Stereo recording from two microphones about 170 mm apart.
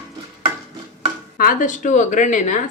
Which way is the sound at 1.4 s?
55° left (ahead or behind).